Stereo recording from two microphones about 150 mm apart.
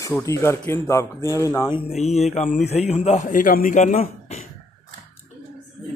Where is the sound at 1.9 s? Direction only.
45° left (ahead or behind).